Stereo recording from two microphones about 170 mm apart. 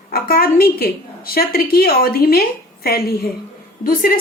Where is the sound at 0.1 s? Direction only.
60° left (ahead or behind).